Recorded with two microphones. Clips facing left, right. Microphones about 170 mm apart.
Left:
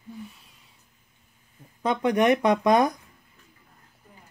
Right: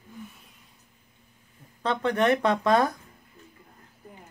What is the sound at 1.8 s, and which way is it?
Speech, 15° left (ahead or behind).